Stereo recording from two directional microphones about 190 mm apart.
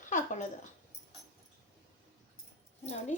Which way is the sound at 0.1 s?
40° left (ahead or behind).